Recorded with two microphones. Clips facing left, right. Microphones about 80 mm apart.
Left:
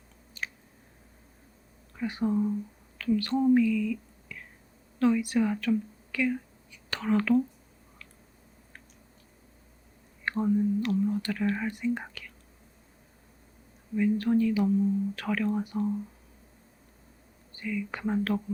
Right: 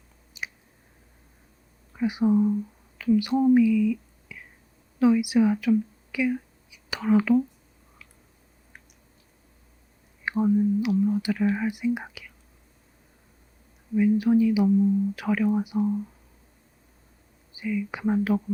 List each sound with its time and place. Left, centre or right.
0.4 s chewing: centre
2.0 s speech: centre
10.2 s speech: centre
13.9 s speech: centre
17.5 s speech: centre